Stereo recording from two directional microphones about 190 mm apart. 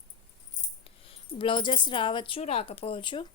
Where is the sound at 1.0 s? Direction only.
30° left (ahead or behind).